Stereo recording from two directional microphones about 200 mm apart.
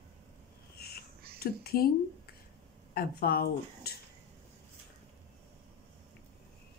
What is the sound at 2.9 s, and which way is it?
Speech, 50° left (ahead or behind).